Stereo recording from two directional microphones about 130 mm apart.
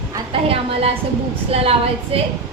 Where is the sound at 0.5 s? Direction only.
50° right (ahead or behind).